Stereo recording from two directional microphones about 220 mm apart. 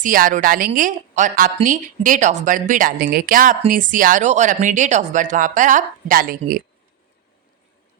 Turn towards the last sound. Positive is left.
turn(degrees=-40)  # may be behind; listen again after turning